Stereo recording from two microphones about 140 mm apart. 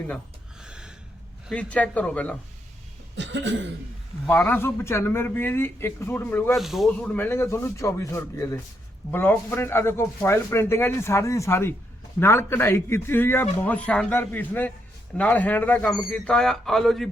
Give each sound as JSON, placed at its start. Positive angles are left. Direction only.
{"t": 0.6, "sound": "gasp", "side_deg": -5}
{"t": 1.5, "sound": "speech", "side_deg": 10}
{"t": 4.3, "sound": "speech", "side_deg": 10}
{"t": 6.5, "sound": "speech", "side_deg": 0}